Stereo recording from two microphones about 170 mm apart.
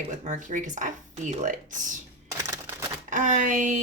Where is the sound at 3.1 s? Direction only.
45° right (ahead or behind).